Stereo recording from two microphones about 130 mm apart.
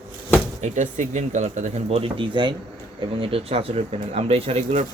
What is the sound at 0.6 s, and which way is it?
Speech, 65° right (ahead or behind).